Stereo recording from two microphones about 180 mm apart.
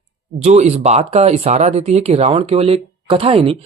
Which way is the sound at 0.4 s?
40° right (ahead or behind).